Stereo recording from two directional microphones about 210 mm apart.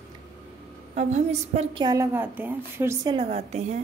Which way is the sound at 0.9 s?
30° right (ahead or behind).